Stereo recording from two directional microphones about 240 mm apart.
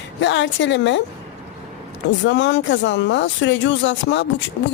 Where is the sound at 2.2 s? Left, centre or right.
Left.